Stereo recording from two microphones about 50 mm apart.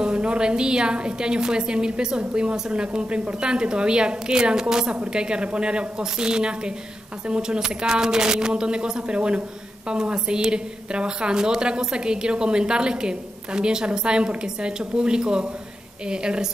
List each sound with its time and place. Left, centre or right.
0.0 s a woman's voice: centre